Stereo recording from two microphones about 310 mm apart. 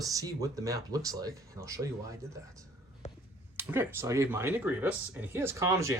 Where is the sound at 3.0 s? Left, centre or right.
Left.